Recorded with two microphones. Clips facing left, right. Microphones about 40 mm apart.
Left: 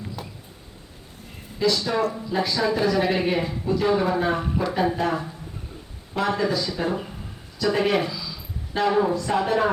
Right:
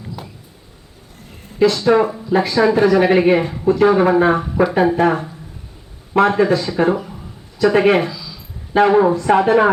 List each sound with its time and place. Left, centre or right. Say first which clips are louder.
1.6 s speech: right 9 dB; right
4.9 s speech: right 9 dB; right
8.1 s a sound: right 1 dB; centre
8.7 s speech: right 9 dB; right